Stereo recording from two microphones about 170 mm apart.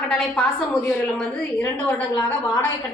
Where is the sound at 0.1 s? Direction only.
5° left (ahead or behind).